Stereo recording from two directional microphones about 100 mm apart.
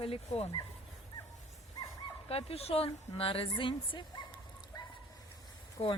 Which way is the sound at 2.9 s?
65° left (ahead or behind).